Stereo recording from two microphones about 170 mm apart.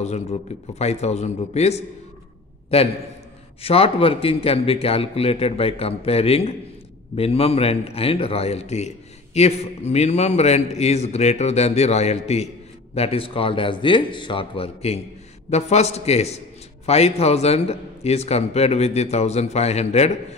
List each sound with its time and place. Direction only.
0.0 s a man's voice: 40° left (ahead or behind)
3.6 s a man's voice: 35° left (ahead or behind)